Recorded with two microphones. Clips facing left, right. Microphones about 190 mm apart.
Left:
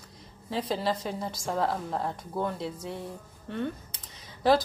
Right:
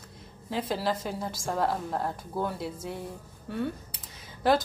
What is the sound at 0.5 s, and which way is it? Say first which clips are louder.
A woman's voice: even; centre (ahead or behind).